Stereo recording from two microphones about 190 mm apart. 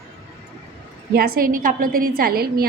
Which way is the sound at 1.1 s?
55° right (ahead or behind).